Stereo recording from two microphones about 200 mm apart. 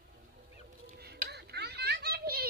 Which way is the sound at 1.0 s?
55° right (ahead or behind).